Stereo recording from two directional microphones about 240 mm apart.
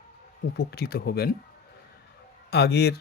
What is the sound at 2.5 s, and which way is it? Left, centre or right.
Speech, left.